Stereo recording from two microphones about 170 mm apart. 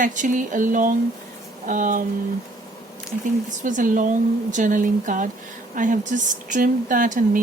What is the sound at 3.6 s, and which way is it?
A woman's voice, 50° right (ahead or behind).